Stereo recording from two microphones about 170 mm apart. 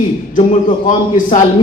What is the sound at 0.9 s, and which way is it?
Speech, 50° left (ahead or behind).